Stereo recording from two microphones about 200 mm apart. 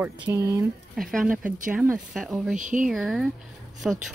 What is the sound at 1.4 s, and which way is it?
Speech, 40° right (ahead or behind).